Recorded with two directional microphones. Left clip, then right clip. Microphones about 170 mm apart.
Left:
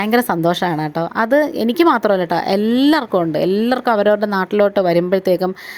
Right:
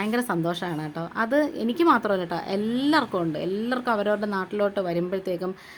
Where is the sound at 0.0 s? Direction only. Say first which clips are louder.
Left 10 dB; 45° left (ahead or behind).